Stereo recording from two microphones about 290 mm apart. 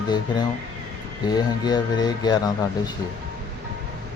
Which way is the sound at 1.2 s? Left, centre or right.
Centre.